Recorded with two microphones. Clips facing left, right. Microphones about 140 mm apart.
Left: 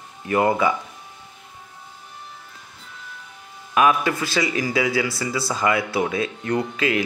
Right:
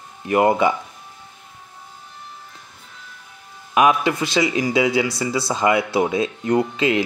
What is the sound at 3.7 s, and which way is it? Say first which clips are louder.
Speech: right 2 dB; 20° right (ahead or behind).